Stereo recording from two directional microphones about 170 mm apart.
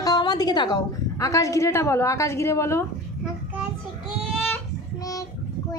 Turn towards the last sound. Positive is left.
turn(degrees=5)  # may be behind; listen again after turning